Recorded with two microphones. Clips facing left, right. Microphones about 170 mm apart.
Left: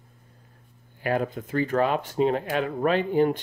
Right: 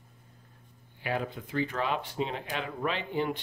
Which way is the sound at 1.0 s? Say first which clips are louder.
Left 7 dB; 45° left (ahead or behind).